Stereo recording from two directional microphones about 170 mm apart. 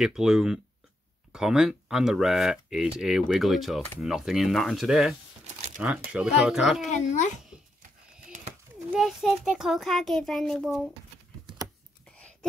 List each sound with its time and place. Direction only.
0.0 s a child's voice: 5° right (ahead or behind)
6.9 s a child's voice: 45° left (ahead or behind)
8.9 s a child's voice: centre (ahead or behind)
12.1 s a sound: 5° left (ahead or behind)